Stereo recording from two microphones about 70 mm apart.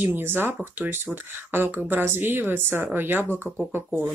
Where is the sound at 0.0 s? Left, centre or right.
Right.